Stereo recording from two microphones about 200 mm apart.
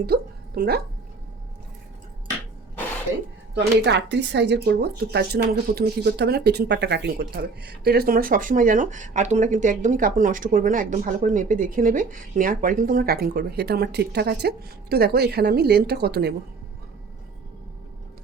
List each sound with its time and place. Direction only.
0.0 s speech: 50° right (ahead or behind)
3.5 s speech: 55° right (ahead or behind)